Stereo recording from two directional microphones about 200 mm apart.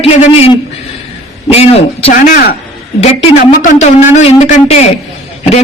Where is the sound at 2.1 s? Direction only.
45° left (ahead or behind).